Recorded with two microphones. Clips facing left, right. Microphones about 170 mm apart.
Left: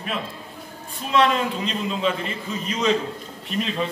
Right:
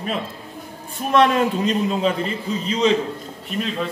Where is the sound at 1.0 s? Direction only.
50° right (ahead or behind).